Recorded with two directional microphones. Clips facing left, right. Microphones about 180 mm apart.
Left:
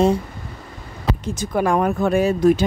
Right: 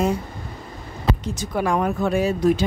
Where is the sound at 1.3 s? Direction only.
50° left (ahead or behind).